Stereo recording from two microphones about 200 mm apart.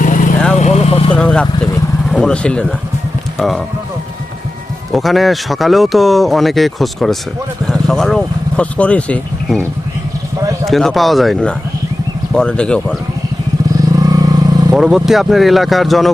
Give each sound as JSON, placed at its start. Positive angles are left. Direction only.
{"t": 0.0, "sound": "vehicle", "side_deg": 40}
{"t": 1.1, "sound": "speech", "side_deg": 5}
{"t": 4.9, "sound": "speech", "side_deg": 0}
{"t": 10.7, "sound": "speech", "side_deg": 0}
{"t": 14.0, "sound": "vehicle", "side_deg": -20}
{"t": 14.8, "sound": "speech", "side_deg": -5}